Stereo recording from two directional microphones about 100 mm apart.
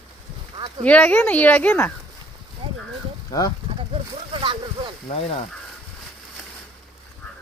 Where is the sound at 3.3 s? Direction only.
40° left (ahead or behind).